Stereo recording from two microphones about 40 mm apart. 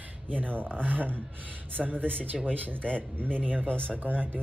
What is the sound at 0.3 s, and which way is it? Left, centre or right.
Speech, right.